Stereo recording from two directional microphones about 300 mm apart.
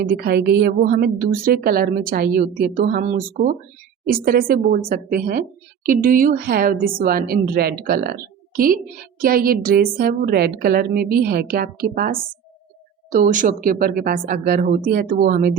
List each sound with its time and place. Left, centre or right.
0.0 s a woman's voice: right